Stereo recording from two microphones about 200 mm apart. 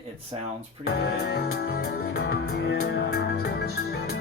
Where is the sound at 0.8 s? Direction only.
50° left (ahead or behind).